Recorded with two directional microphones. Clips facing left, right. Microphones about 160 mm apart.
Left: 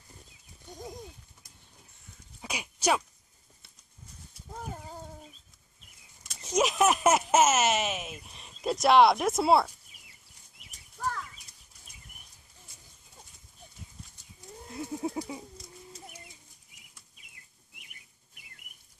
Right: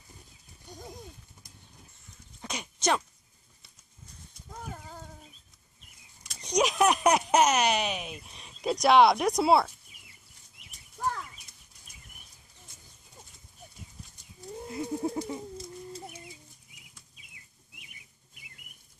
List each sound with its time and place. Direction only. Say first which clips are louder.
2.4 s a sound: left 1 dB; 10° left (ahead or behind)
6.2 s speech: even; centre (ahead or behind)
14.7 s speech: right 2 dB; centre (ahead or behind)